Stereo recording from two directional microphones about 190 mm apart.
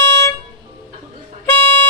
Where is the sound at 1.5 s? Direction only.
10° left (ahead or behind).